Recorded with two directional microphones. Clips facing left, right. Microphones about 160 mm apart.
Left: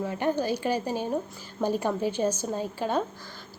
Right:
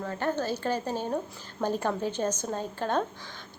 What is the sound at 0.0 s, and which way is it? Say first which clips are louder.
A woman's voice: left 3 dB; 15° left (ahead or behind).